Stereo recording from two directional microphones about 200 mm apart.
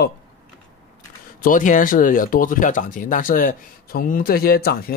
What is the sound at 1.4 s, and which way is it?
Speech, 40° left (ahead or behind).